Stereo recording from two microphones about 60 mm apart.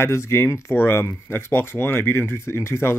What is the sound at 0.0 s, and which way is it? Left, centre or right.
Speech, left.